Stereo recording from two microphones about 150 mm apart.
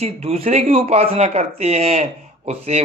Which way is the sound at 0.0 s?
40° right (ahead or behind).